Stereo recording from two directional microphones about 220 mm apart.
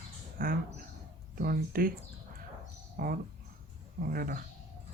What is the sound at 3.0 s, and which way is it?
Speech, 40° right (ahead or behind).